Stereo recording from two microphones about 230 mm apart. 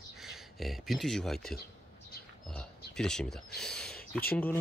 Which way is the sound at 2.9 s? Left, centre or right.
Centre.